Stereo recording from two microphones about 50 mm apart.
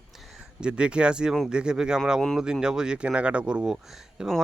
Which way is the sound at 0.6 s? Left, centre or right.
Right.